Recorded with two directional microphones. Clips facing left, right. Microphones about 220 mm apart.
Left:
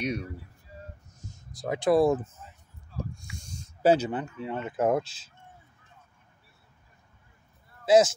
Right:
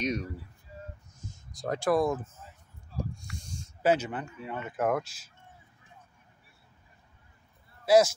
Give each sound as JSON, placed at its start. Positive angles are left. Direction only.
{"t": 0.0, "sound": "speech", "side_deg": 10}
{"t": 1.1, "sound": "a sound", "side_deg": 0}
{"t": 1.8, "sound": "speech", "side_deg": 25}
{"t": 3.3, "sound": "a sound", "side_deg": 35}
{"t": 4.2, "sound": "speech", "side_deg": 25}
{"t": 7.8, "sound": "speech", "side_deg": 20}